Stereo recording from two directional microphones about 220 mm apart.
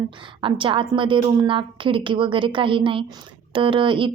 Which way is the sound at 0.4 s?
25° right (ahead or behind).